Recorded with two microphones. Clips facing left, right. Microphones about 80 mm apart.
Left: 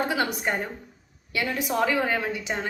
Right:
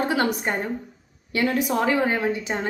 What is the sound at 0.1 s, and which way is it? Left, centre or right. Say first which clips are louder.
A woman's voice: right 3 dB; right.